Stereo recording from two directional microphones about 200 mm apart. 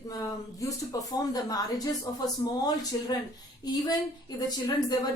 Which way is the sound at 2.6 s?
20° left (ahead or behind).